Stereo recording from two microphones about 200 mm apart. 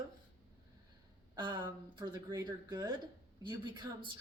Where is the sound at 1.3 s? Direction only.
20° right (ahead or behind).